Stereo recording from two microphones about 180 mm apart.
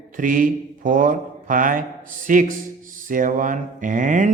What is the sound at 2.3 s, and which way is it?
Speech, 50° right (ahead or behind).